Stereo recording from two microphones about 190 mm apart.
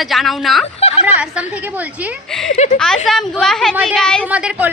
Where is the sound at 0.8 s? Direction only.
35° left (ahead or behind).